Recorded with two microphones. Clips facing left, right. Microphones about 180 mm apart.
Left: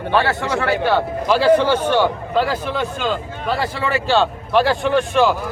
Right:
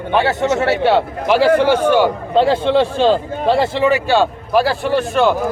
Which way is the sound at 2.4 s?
25° right (ahead or behind).